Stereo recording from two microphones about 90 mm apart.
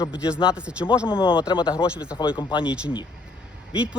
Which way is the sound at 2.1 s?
60° left (ahead or behind).